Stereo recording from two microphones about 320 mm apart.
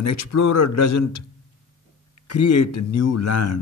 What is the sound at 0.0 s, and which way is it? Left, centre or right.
Speech, left.